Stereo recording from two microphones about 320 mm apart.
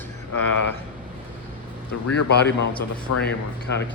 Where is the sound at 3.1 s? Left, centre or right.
Left.